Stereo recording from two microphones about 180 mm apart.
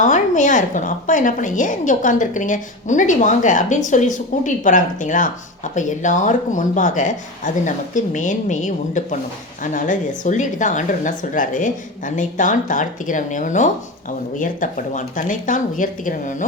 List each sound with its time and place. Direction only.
0.0 s a woman's voice: 45° left (ahead or behind)